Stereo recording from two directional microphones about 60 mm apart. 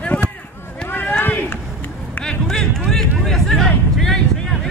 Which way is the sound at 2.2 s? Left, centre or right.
Centre.